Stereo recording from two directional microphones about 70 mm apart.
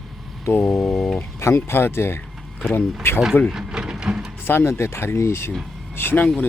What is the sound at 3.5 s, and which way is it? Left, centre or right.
Printer, centre.